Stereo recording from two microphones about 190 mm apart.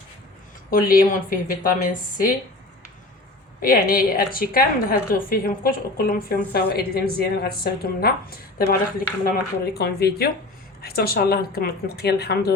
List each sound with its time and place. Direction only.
0.7 s a woman's voice: 50° left (ahead or behind)
3.6 s a woman's voice: 50° left (ahead or behind)